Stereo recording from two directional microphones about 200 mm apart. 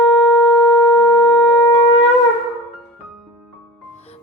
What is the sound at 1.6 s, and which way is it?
Wind instrument, 25° left (ahead or behind).